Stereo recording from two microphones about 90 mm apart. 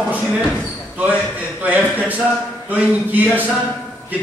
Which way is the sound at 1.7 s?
20° right (ahead or behind).